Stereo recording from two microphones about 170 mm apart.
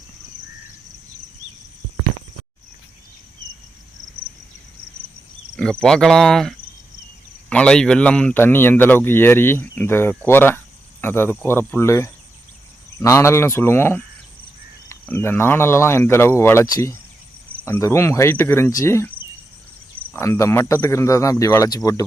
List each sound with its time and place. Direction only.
5.5 s speech: 5° left (ahead or behind)
20.1 s speech: 15° left (ahead or behind)